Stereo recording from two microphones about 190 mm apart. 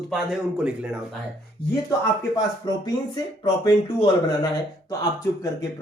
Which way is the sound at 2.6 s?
20° left (ahead or behind).